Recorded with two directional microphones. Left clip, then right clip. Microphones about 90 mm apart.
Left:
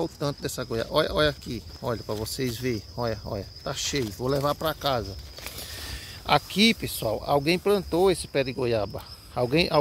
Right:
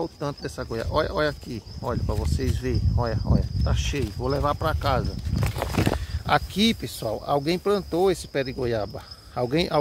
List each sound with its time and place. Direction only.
0.0 s speech: 35° left (ahead or behind); by 4.7 s 20° left (ahead or behind)
6.2 s speech: 5° right (ahead or behind)